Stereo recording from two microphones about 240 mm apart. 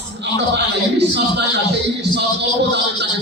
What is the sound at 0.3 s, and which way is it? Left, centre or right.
A man's voice, right.